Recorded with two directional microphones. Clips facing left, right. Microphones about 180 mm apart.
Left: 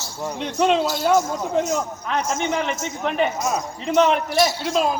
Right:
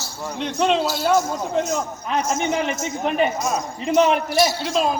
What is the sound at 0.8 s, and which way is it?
Speech, 10° right (ahead or behind).